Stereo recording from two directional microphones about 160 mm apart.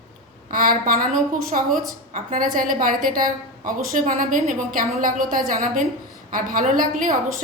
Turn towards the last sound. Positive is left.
turn(degrees=-60)  # may be behind; listen again after turning